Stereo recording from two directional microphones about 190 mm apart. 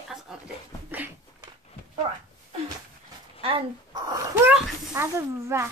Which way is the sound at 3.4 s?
30° right (ahead or behind).